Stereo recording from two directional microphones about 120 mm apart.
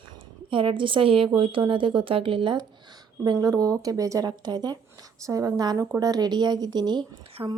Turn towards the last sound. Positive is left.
turn(degrees=-40)  # may be behind; listen again after turning